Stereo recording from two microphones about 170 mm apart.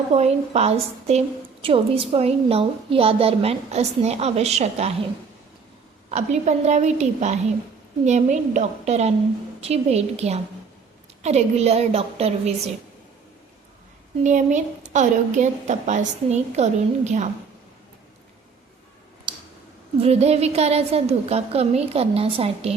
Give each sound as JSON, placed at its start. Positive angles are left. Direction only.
{"t": 0.1, "sound": "a woman's voice", "side_deg": -40}
{"t": 6.1, "sound": "a woman's voice", "side_deg": -40}
{"t": 14.3, "sound": "a woman's voice", "side_deg": -45}
{"t": 19.3, "sound": "a sound", "side_deg": -25}
{"t": 20.0, "sound": "a woman's voice", "side_deg": -40}